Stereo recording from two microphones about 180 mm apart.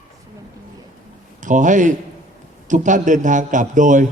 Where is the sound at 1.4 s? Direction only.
45° right (ahead or behind).